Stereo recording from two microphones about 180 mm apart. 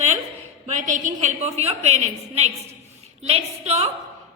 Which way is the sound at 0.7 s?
45° right (ahead or behind).